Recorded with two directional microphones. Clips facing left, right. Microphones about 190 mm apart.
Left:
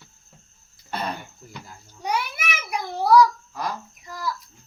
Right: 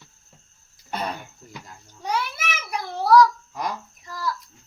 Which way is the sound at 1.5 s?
5° left (ahead or behind).